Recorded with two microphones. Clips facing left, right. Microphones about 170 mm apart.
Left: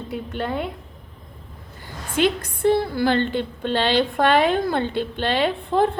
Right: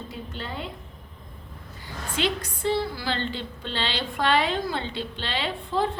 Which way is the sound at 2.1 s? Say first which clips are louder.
Left 7 dB; 55° left (ahead or behind).